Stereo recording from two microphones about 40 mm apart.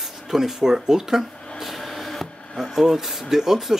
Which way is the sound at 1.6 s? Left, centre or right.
Centre.